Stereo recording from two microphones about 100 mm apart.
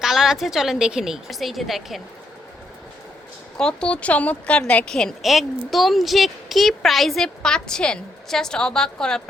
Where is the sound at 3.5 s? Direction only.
10° left (ahead or behind).